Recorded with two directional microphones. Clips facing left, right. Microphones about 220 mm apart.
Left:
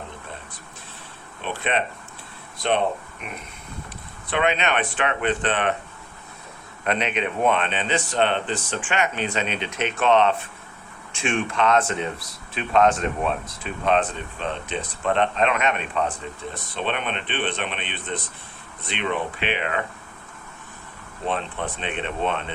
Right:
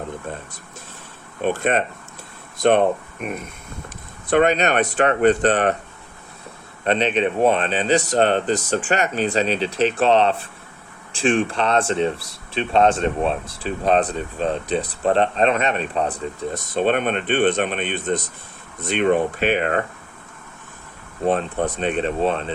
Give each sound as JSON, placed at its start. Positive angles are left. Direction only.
{"t": 1.4, "sound": "speech", "side_deg": -45}
{"t": 6.8, "sound": "speech", "side_deg": -30}
{"t": 21.2, "sound": "speech", "side_deg": -40}